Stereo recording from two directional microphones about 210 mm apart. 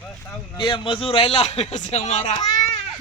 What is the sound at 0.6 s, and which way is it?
A man's voice, 25° left (ahead or behind).